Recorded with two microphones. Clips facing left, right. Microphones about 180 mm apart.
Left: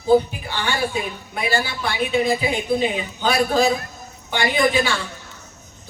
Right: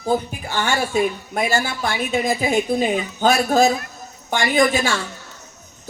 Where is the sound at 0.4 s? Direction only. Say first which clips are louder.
Right 2 dB; 45° right (ahead or behind).